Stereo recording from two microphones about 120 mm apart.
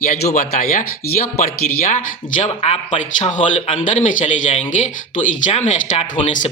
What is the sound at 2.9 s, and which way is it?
Speech, 85° left.